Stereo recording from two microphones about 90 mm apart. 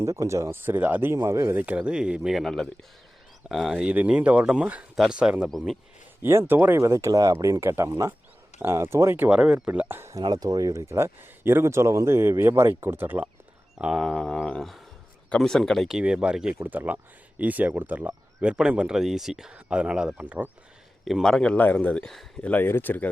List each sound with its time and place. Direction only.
0.0 s speech: 35° right (ahead or behind); by 1.1 s 20° right (ahead or behind)
1.1 s speech: 35° right (ahead or behind)
1.5 s speech: 15° right (ahead or behind)
2.4 s speech: 5° left (ahead or behind)
3.8 s speech: 15° right (ahead or behind)
5.5 s speech: centre (ahead or behind)
6.5 s speech: 20° right (ahead or behind)
9.3 s speech: 10° right (ahead or behind)
10.0 s speech: 35° right (ahead or behind)
13.8 s speech: 5° right (ahead or behind)
16.0 s speech: 10° right (ahead or behind)
21.0 s speech: centre (ahead or behind); by 23.0 s 20° left (ahead or behind)